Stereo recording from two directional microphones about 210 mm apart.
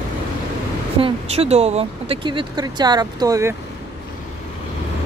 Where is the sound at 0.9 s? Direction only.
25° right (ahead or behind).